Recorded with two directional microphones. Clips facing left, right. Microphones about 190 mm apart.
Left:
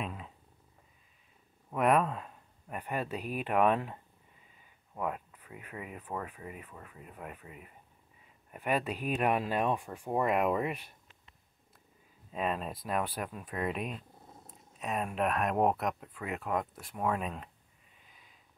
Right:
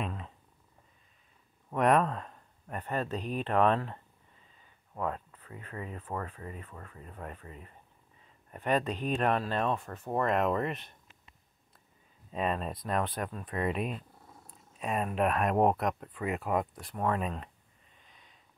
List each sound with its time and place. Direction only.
0.0 s purr: 5° left (ahead or behind)
1.7 s speech: 5° left (ahead or behind)
12.3 s speech: centre (ahead or behind)
14.2 s dog: 20° left (ahead or behind)
14.8 s speech: centre (ahead or behind)
18.0 s a sound: 5° left (ahead or behind)